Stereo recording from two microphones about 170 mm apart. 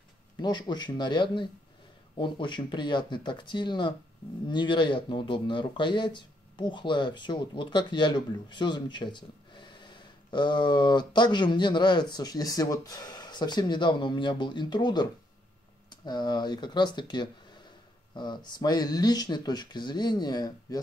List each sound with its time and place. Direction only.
0.4 s speech: 25° left (ahead or behind)